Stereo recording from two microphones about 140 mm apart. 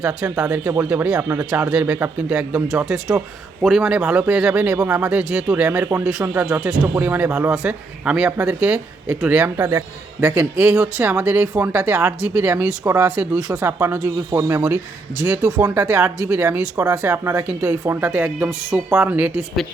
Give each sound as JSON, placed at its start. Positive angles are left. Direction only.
{"t": 0.0, "sound": "speech", "side_deg": -5}